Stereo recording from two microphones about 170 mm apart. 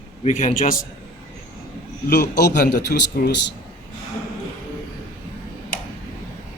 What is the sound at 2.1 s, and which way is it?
A man's voice, 75° left (ahead or behind).